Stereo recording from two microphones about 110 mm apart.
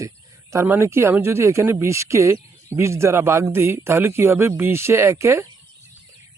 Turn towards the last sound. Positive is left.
turn(degrees=-25)  # may be behind; listen again after turning